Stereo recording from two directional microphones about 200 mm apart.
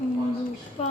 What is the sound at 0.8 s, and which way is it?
Speech, 30° left (ahead or behind).